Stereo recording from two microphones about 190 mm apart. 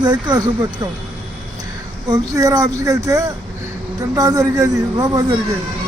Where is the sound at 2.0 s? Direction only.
20° right (ahead or behind).